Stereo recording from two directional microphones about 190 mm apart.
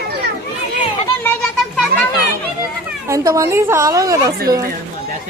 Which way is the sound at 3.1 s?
15° right (ahead or behind).